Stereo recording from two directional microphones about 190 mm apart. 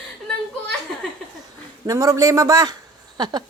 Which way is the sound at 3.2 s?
20° right (ahead or behind).